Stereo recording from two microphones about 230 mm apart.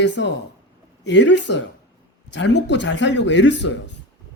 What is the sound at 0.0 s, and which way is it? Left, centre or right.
Speech, left.